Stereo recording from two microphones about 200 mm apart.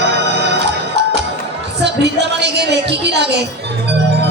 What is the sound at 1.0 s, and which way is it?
Music, 60° right (ahead or behind).